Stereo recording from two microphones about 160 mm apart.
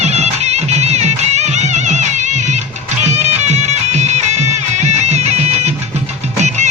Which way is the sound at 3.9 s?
45° right (ahead or behind).